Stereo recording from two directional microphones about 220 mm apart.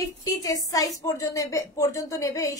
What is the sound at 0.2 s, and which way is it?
Speech, 15° left (ahead or behind).